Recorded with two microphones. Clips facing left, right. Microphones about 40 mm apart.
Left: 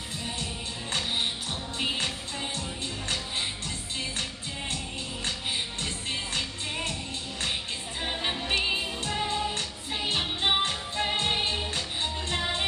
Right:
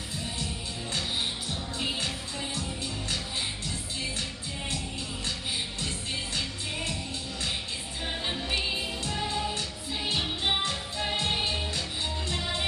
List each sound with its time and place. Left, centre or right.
8.1 s music: left
10.4 s music: left